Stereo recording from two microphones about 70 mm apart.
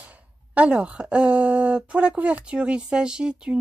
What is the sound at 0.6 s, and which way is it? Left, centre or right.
Speech, centre.